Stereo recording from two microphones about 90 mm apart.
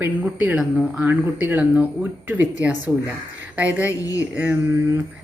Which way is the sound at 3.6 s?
15° right (ahead or behind).